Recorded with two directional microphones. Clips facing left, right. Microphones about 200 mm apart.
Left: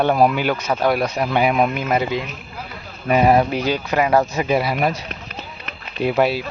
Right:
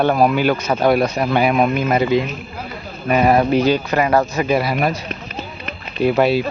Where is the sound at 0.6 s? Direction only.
Centre (ahead or behind).